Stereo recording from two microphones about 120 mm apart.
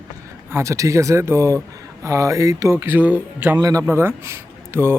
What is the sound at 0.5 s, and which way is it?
Speech, 25° right (ahead or behind).